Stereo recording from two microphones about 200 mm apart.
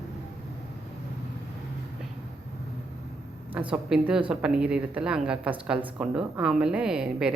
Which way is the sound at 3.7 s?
5° right (ahead or behind).